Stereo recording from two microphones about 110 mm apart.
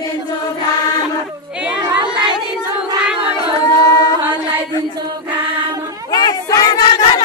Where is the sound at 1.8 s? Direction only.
45° right (ahead or behind).